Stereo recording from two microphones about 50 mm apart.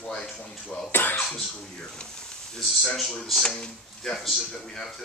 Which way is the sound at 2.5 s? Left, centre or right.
Centre.